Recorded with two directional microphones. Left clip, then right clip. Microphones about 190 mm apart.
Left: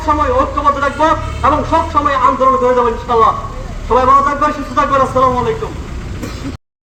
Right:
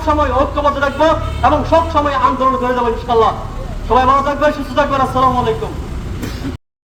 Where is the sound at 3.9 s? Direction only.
30° right (ahead or behind).